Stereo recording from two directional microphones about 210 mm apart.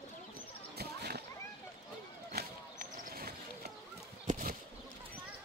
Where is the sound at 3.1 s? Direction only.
45° right (ahead or behind).